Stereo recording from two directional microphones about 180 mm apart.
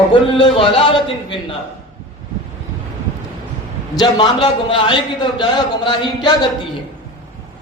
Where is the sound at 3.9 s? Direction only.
25° left (ahead or behind).